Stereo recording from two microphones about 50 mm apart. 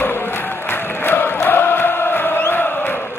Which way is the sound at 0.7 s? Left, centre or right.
Left.